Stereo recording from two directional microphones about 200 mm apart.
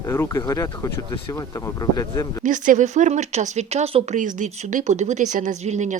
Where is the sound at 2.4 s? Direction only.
40° right (ahead or behind).